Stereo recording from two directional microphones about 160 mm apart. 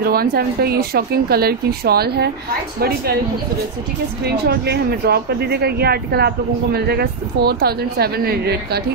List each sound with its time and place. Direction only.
0.0 s speech: 70° right (ahead or behind); by 2.3 s 85° right
4.2 s speech: 90° right